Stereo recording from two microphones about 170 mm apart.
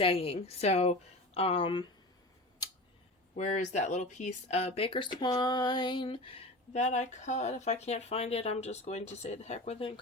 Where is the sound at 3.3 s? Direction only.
45° left (ahead or behind).